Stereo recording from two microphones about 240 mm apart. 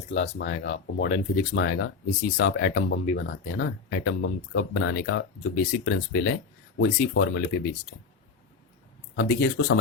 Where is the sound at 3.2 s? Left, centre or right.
Left.